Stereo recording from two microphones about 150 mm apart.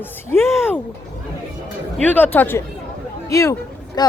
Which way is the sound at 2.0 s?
10° left (ahead or behind).